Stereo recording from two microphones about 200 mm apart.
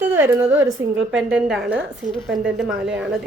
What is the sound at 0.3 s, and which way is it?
A woman's voice, 10° right (ahead or behind).